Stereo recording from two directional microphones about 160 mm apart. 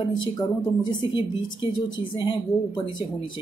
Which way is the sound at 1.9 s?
30° left (ahead or behind).